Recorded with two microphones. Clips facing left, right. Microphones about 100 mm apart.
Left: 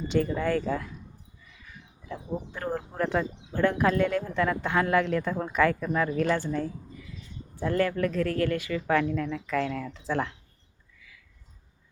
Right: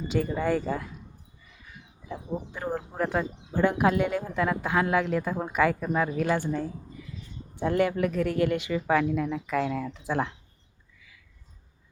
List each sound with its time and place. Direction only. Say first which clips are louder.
0.1 s speech: even; 5° right (ahead or behind)
2.1 s speech: even; 5° right (ahead or behind)
8.9 s speech: right 1 dB; 10° right (ahead or behind)